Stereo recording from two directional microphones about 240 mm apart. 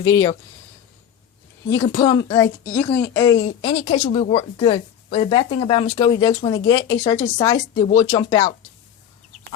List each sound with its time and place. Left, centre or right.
0.0 s speech: centre
1.9 s speech: centre